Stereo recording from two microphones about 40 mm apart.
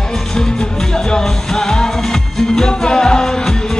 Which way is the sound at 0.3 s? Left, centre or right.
Centre.